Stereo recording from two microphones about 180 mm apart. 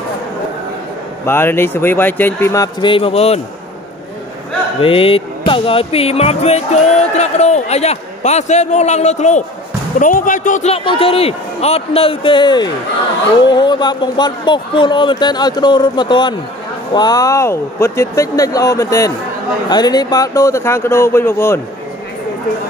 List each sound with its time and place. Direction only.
1.2 s speech: 15° left (ahead or behind); by 3.3 s 35° left (ahead or behind)
4.7 s speech: 30° left (ahead or behind); by 21.5 s 15° left (ahead or behind)